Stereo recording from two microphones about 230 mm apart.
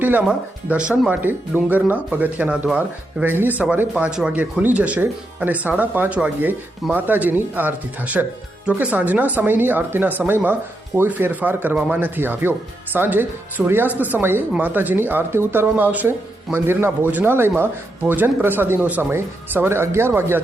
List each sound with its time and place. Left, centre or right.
0.0 s speech: centre